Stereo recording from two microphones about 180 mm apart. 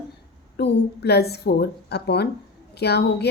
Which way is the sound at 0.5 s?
65° left (ahead or behind).